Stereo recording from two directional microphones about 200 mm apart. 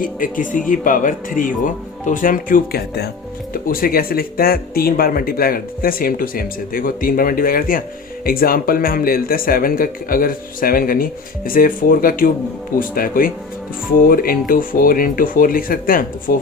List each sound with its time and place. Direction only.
0.0 s speech: 40° left (ahead or behind)